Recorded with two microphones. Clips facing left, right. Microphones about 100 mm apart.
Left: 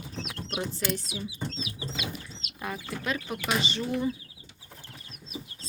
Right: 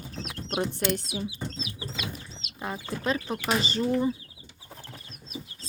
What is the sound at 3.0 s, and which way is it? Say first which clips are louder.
Speech: right 5 dB; 35° right (ahead or behind).